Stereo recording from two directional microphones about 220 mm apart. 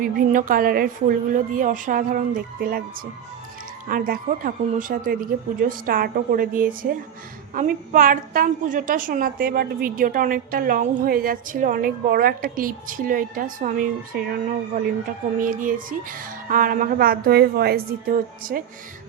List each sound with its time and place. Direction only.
0.0 s a woman's voice: 40° right (ahead or behind)
3.8 s a woman's voice: 40° right (ahead or behind)